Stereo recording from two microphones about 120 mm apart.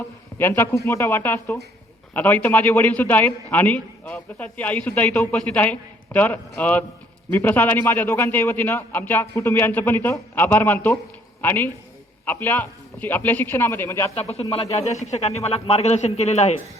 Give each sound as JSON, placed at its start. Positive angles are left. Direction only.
{"t": 0.3, "sound": "a man's voice", "side_deg": 20}
{"t": 14.2, "sound": "a man's voice", "side_deg": 60}
{"t": 15.4, "sound": "a man's voice", "side_deg": 60}